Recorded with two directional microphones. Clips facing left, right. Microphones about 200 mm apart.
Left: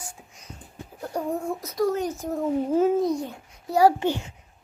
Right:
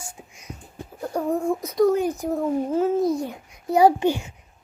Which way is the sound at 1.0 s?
10° left (ahead or behind).